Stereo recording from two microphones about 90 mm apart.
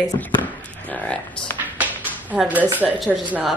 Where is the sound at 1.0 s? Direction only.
15° left (ahead or behind).